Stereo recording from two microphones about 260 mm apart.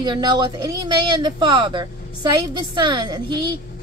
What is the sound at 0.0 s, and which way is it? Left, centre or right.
Speech, centre.